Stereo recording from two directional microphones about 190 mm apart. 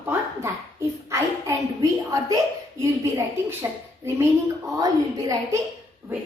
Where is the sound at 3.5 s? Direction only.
15° right (ahead or behind).